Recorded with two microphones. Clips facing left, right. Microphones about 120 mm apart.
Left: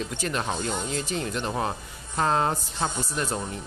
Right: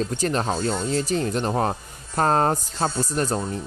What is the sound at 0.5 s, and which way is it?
Speech, 15° left (ahead or behind).